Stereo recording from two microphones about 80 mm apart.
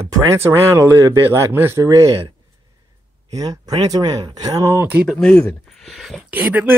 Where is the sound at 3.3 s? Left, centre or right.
Right.